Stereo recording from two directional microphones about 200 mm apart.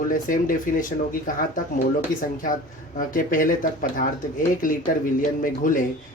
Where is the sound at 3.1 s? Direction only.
45° left (ahead or behind).